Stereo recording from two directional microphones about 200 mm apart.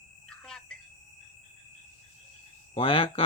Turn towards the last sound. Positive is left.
turn(degrees=25)  # may be behind; listen again after turning